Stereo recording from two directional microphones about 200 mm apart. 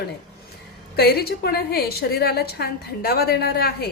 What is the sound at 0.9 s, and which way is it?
A woman's voice, 50° left (ahead or behind).